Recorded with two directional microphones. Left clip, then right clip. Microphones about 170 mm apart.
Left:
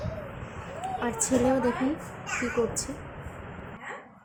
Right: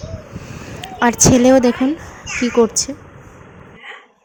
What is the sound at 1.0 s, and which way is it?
Speech, 50° right (ahead or behind).